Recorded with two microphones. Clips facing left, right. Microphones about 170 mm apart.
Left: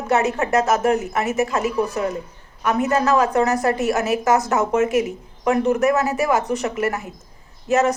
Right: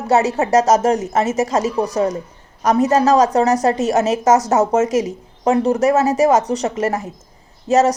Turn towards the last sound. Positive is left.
turn(degrees=-25)  # may be behind; listen again after turning